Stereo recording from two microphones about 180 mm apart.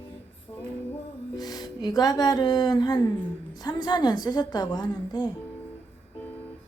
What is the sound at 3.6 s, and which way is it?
A woman's voice, 20° left (ahead or behind).